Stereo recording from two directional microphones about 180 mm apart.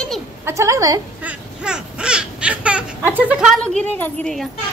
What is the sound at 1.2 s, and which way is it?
Baby cry, 5° right (ahead or behind).